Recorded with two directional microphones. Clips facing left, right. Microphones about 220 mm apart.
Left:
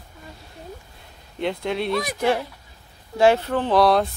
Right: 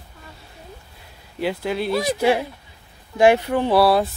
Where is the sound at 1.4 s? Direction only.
5° right (ahead or behind).